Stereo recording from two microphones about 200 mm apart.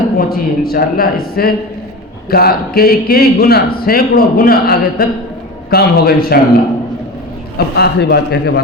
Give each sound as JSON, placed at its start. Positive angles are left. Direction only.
{"t": 0.2, "sound": "a man's voice", "side_deg": 50}
{"t": 7.8, "sound": "a man's voice", "side_deg": 55}